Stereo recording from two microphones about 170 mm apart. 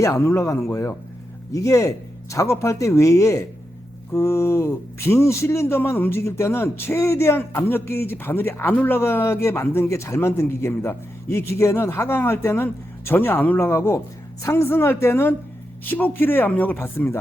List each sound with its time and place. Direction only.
0.0 s speech: 15° left (ahead or behind)